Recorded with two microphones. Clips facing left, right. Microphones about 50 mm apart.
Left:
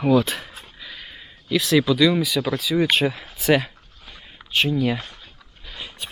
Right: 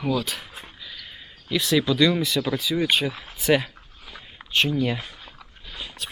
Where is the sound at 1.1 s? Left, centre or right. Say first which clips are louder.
Left 4 dB; centre.